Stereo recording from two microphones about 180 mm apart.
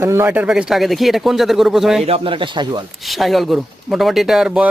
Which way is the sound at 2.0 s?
30° right (ahead or behind).